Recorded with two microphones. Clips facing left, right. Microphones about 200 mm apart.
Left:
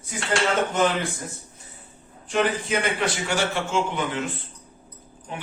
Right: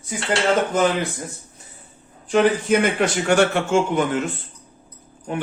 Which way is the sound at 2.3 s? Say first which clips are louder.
Right 7 dB; 50° right (ahead or behind).